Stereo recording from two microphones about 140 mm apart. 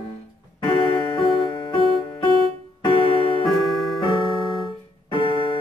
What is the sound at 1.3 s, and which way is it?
Music, 40° right (ahead or behind).